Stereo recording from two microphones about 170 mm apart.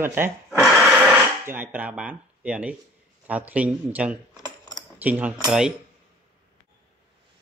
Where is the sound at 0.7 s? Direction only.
10° right (ahead or behind).